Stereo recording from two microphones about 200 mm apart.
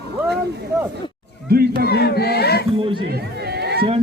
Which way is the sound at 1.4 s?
50° right (ahead or behind).